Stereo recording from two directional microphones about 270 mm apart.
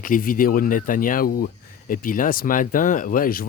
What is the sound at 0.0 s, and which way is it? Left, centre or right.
Speech, left.